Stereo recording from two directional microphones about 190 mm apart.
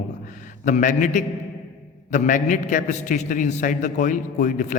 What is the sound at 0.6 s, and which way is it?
A man's voice, 40° left (ahead or behind).